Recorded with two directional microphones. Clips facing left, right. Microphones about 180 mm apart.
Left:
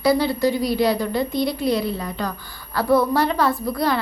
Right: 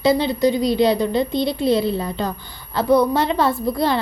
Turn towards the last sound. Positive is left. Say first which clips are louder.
# right 2 dB
turn(degrees=-25)  # may be behind; listen again after turning